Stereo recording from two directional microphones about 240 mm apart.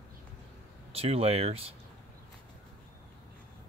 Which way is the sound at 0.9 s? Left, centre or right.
Right.